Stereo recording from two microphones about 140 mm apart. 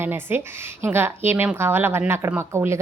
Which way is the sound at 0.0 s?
15° right (ahead or behind).